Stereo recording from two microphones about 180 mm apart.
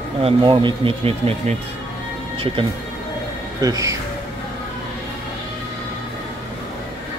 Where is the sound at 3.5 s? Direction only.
20° right (ahead or behind).